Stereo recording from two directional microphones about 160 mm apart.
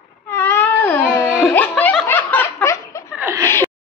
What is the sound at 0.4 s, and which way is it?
Cat, 10° left (ahead or behind).